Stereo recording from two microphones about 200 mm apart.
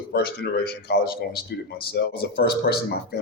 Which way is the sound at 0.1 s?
55° left (ahead or behind).